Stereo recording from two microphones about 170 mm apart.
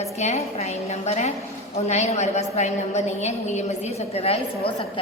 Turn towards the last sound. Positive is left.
turn(degrees=35)  # may be behind; listen again after turning